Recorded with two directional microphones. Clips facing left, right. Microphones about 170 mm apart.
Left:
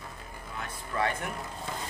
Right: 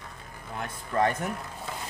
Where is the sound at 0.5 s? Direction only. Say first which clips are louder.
Right 5 dB; 45° right (ahead or behind).